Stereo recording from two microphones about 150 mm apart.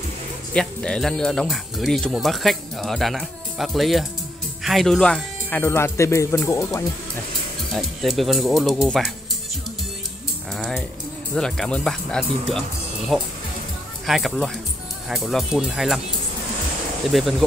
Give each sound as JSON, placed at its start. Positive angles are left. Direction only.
{"t": 0.5, "sound": "speech", "side_deg": 5}
{"t": 7.7, "sound": "speech", "side_deg": 0}
{"t": 10.5, "sound": "speech", "side_deg": 5}
{"t": 17.1, "sound": "speech", "side_deg": 0}